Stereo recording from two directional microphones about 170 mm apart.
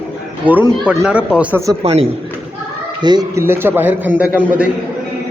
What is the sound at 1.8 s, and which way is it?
Speech, 40° right (ahead or behind).